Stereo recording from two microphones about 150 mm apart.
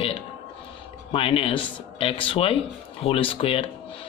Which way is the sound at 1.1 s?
40° left (ahead or behind).